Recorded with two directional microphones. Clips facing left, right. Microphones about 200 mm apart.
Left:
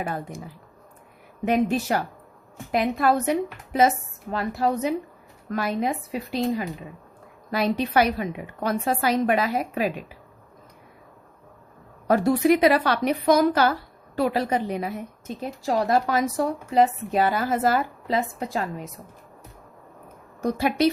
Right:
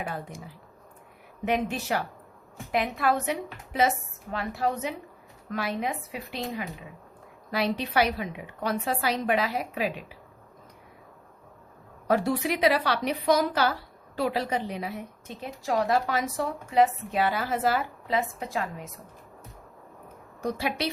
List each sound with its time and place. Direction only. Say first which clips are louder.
0.0 s a woman's voice: left 4 dB; 45° left (ahead or behind)
1.5 s a woman's voice: left 5 dB; 40° left (ahead or behind)
12.0 s a woman's voice: left 6 dB; 45° left (ahead or behind)
15.4 s a woman's voice: left 3 dB; 35° left (ahead or behind)
18.3 s a woman's voice: left 4 dB; 35° left (ahead or behind)
18.6 s a woman's voice: left 4 dB; centre (ahead or behind)
20.4 s a woman's voice: left 8 dB; 45° left (ahead or behind)